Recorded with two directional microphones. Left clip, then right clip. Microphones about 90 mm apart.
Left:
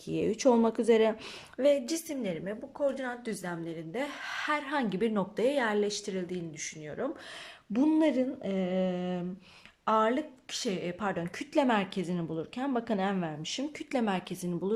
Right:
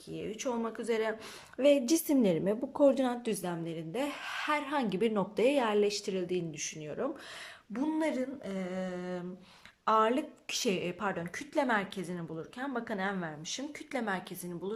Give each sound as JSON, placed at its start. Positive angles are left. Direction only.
{"t": 0.3, "sound": "a woman's voice", "side_deg": 60}
{"t": 1.5, "sound": "a woman's voice", "side_deg": -15}
{"t": 1.8, "sound": "a woman's voice", "side_deg": -40}
{"t": 3.2, "sound": "a woman's voice", "side_deg": -20}
{"t": 7.7, "sound": "speech", "side_deg": 20}
{"t": 9.8, "sound": "speech", "side_deg": 0}
{"t": 10.5, "sound": "a woman's voice", "side_deg": -15}